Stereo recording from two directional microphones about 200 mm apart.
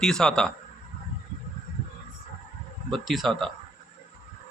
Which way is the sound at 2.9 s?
Centre (ahead or behind).